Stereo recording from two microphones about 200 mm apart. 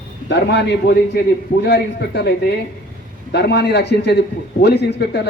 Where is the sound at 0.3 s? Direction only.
60° left (ahead or behind).